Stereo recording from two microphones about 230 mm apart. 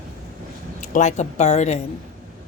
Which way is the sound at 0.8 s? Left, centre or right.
Left.